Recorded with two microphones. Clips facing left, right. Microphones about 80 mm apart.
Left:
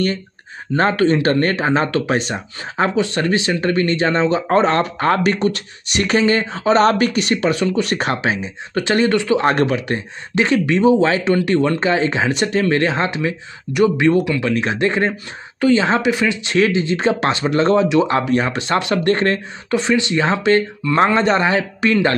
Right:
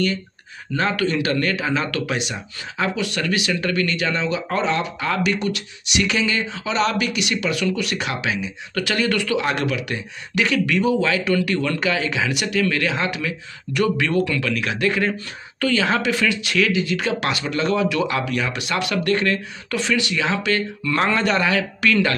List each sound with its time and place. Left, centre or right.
0.7 s speech: left
9.4 s speech: left